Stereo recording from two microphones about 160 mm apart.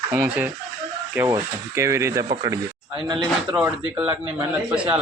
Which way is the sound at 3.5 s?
10° right (ahead or behind).